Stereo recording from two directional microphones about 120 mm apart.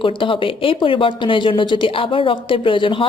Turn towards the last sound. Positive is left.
turn(degrees=45)  # may be behind; listen again after turning